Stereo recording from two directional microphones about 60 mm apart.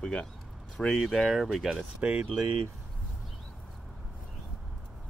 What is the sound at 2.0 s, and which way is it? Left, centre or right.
Speech, right.